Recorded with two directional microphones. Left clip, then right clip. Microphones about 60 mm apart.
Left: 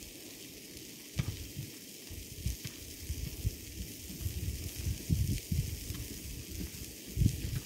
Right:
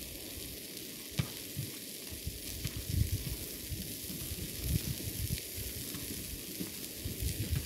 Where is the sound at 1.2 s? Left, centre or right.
Right.